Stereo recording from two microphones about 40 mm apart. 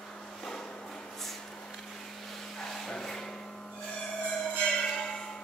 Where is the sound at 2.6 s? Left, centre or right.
Centre.